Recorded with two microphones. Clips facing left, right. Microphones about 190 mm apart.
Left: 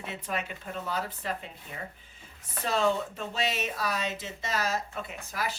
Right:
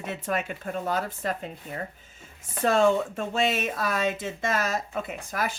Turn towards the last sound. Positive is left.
turn(degrees=-50)  # may be behind; listen again after turning